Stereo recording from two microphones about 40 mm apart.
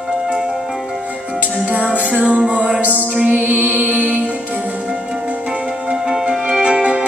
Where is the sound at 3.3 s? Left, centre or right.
Right.